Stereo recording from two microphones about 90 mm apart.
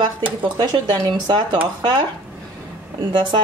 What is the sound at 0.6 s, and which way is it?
Speech, 50° right (ahead or behind).